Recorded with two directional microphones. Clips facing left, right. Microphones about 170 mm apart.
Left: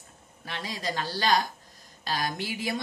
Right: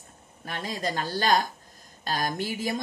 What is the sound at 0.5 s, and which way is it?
A woman's voice, 45° right (ahead or behind).